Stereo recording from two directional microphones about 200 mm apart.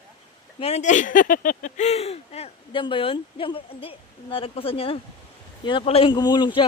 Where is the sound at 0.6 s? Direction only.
35° left (ahead or behind).